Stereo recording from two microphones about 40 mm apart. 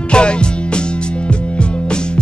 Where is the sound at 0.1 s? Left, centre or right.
Left.